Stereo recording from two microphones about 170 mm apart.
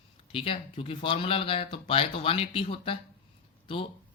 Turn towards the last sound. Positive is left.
turn(degrees=30)  # may be behind; listen again after turning